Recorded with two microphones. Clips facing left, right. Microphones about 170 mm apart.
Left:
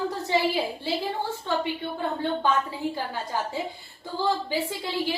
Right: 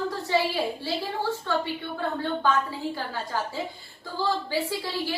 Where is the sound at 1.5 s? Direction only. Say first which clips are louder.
Left 1 dB; 15° left (ahead or behind).